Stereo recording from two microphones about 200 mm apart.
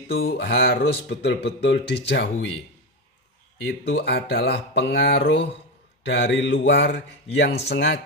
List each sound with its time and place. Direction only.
0.2 s speech: 55° left (ahead or behind)
3.6 s speech: 60° left (ahead or behind)